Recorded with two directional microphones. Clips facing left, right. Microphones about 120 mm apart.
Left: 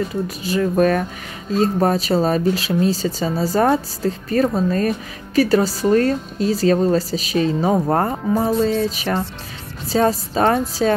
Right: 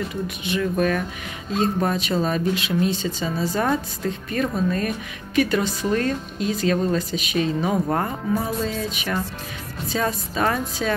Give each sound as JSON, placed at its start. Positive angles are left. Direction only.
{"t": 0.1, "sound": "speech", "side_deg": 40}